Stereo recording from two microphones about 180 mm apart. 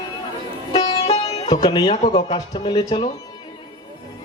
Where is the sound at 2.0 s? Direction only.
35° left (ahead or behind).